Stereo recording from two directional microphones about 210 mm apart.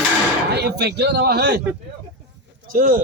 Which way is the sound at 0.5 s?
50° right (ahead or behind).